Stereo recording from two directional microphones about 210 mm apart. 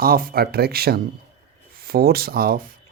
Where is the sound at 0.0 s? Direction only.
45° right (ahead or behind).